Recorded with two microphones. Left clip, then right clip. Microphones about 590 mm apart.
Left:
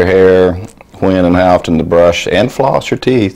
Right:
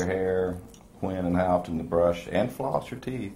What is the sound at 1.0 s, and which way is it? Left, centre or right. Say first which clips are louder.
Speech: left 18 dB; left.